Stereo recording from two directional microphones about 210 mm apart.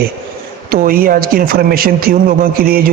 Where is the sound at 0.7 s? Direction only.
45° right (ahead or behind).